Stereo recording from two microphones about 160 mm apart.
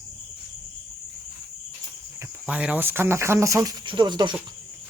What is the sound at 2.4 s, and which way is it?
Speech, 10° right (ahead or behind).